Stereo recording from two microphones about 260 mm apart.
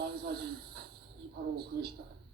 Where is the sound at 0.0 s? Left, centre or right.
Right.